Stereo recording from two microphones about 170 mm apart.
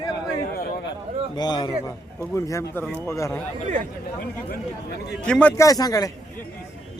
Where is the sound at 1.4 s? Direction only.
25° left (ahead or behind).